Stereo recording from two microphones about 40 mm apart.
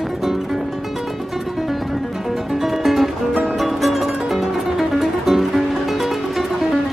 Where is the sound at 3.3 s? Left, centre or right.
Right.